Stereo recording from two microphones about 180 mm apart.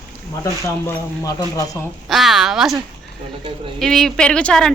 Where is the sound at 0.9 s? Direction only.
20° left (ahead or behind).